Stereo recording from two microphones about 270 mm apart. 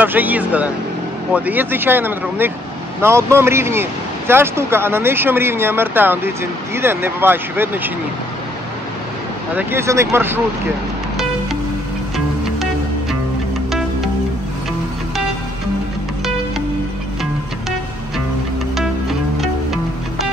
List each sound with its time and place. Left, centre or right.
0.0 s speech: centre
9.6 s speech: centre
13.7 s music: centre
19.4 s music: centre